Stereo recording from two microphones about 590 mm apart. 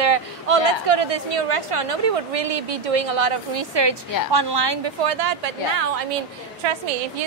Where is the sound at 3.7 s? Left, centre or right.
Right.